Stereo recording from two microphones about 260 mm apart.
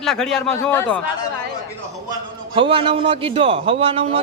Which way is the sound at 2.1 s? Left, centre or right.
Centre.